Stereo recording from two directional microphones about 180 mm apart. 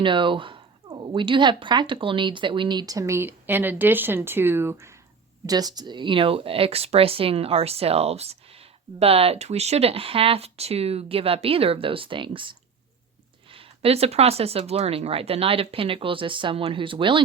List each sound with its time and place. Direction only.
0.0 s speech: 25° right (ahead or behind)